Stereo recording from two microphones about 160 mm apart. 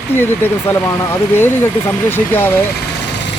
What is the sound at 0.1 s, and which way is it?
Speech, 15° left (ahead or behind).